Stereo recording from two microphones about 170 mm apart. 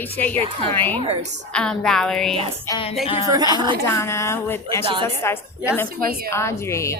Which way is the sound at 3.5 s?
25° right (ahead or behind).